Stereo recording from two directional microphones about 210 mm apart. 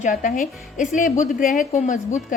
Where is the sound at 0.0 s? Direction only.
40° left (ahead or behind).